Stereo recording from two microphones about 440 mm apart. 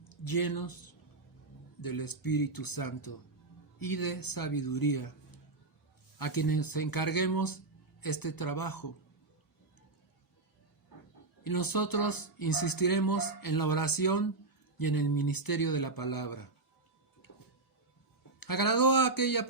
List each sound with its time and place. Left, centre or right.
0.1 s speech: left
1.8 s speech: left
6.1 s speech: left
11.4 s speech: left
18.3 s speech: left